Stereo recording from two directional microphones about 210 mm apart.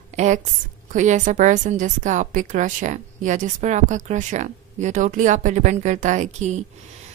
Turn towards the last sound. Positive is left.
turn(degrees=-35)  # may be behind; listen again after turning